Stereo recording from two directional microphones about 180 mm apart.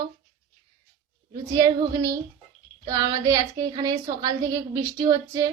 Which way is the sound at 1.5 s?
20° right (ahead or behind).